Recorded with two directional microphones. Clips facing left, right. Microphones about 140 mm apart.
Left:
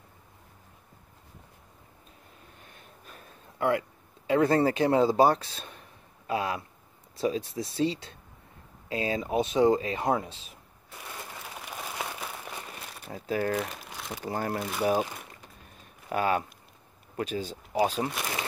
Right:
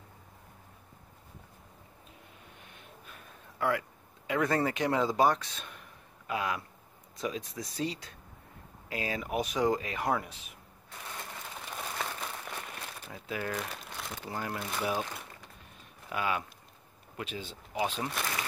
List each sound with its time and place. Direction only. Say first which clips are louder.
2.6 s snort: left 1 dB; 40° left (ahead or behind)
3.5 s a sound: left 4 dB; 25° left (ahead or behind)
4.3 s speech: left 6 dB; 30° left (ahead or behind)
11.6 s a sound: left 1 dB; 10° left (ahead or behind)
13.1 s speech: left 8 dB; 40° left (ahead or behind)
13.8 s crumpling: left 2 dB; 5° left (ahead or behind)
14.2 s speech: left 7 dB; 45° left (ahead or behind)
16.1 s speech: left 6 dB; 40° left (ahead or behind)